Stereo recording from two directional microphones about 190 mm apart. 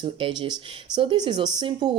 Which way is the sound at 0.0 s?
25° right (ahead or behind).